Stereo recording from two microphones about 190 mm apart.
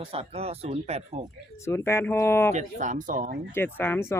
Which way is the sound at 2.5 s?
40° right (ahead or behind).